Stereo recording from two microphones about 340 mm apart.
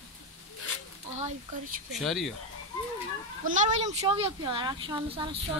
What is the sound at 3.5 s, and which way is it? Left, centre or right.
Speech, right.